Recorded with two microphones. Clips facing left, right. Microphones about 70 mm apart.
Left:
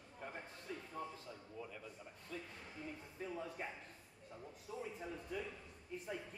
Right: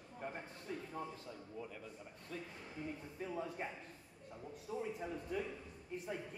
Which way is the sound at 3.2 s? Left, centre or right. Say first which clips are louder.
Right 2 dB; centre.